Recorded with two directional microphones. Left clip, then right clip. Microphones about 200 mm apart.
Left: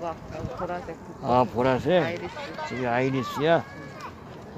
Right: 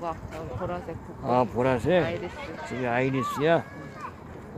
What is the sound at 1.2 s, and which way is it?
Speech, 10° left (ahead or behind).